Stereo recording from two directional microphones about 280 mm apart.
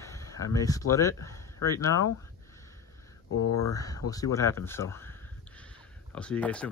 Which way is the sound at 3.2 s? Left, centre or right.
Left.